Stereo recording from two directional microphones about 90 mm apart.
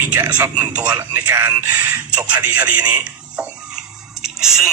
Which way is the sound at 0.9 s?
20° right (ahead or behind).